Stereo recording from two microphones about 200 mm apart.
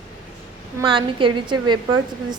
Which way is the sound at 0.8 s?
25° right (ahead or behind).